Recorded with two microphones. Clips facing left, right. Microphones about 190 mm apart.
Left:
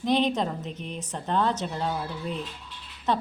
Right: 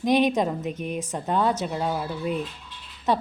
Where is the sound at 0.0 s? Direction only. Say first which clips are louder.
Right 3 dB; 15° right (ahead or behind).